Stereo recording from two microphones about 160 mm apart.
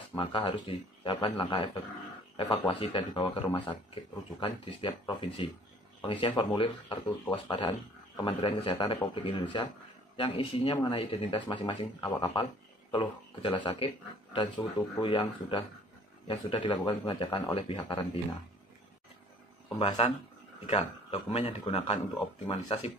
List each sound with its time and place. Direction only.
0.1 s speech: 30° left (ahead or behind)
19.8 s speech: 35° left (ahead or behind)